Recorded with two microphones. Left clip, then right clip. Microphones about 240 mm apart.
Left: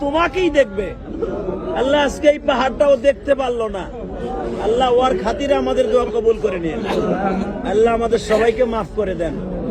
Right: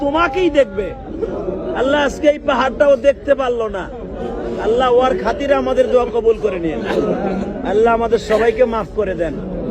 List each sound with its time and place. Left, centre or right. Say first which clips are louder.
0.0 s a man's voice: right 2 dB; centre
4.5 s a man's voice: right 2 dB; centre
6.8 s a man's voice: right 2 dB; right
7.6 s a man's voice: right 2 dB; centre